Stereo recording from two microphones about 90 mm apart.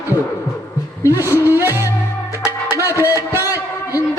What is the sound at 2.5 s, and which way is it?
Music, 30° right (ahead or behind).